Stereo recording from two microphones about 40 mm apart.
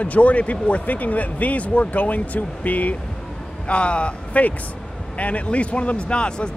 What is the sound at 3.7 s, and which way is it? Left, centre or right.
Speech, left.